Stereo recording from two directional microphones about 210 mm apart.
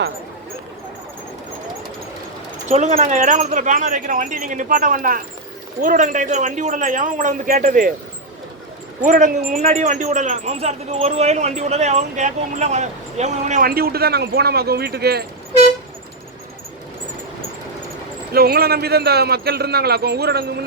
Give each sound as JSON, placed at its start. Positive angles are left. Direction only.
{"t": 2.6, "sound": "a man's voice", "side_deg": -35}
{"t": 9.0, "sound": "a man's voice", "side_deg": -40}
{"t": 18.3, "sound": "a man's voice", "side_deg": -45}